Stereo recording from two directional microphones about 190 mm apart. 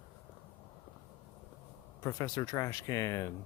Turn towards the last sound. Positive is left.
turn(degrees=15)  # may be behind; listen again after turning